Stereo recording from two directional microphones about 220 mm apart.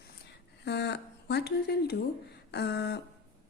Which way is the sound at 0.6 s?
50° left (ahead or behind).